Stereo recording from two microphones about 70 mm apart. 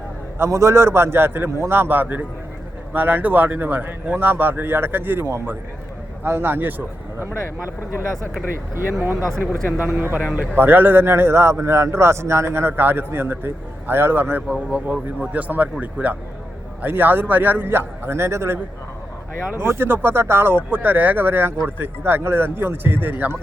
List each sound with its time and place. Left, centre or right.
0.3 s a man's voice: right
9.0 s a man's voice: right